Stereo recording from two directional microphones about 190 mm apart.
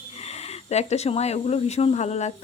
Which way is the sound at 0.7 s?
35° left (ahead or behind).